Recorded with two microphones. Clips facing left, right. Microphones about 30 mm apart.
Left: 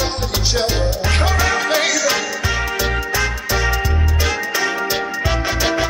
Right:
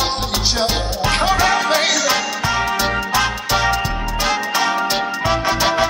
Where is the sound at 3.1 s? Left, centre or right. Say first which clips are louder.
Right 3 dB; right; by 5.6 s centre.